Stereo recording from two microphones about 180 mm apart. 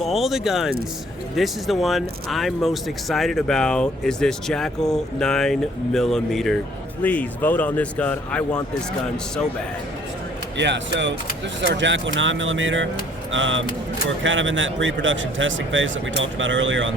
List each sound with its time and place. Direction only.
0.0 s speech: centre (ahead or behind)
10.6 s speech: 80° right